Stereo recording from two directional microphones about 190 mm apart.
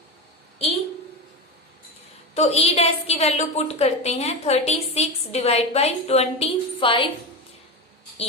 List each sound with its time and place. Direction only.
2.3 s a woman's voice: 35° left (ahead or behind)